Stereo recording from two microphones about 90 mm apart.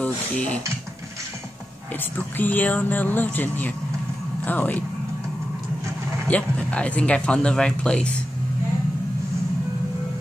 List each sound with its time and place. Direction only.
0.0 s mechanisms: 15° left (ahead or behind)
2.0 s speech: 20° left (ahead or behind)
6.2 s speech: 15° left (ahead or behind)